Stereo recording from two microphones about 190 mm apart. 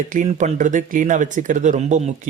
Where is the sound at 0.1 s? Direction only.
40° right (ahead or behind).